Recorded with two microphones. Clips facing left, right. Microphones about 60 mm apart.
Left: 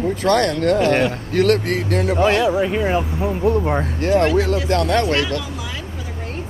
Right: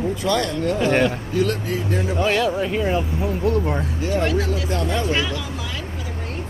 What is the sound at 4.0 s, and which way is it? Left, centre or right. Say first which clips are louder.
Speech: left 6 dB; left.